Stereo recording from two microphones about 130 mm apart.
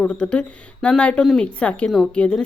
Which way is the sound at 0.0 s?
10° left (ahead or behind).